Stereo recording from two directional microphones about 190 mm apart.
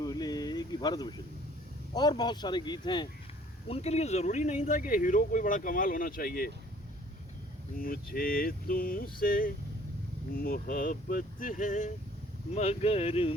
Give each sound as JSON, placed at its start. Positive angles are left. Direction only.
{"t": 0.0, "sound": "a sound", "side_deg": 20}
{"t": 2.0, "sound": "speech", "side_deg": 20}
{"t": 3.7, "sound": "speech", "side_deg": 35}
{"t": 7.8, "sound": "speech", "side_deg": 50}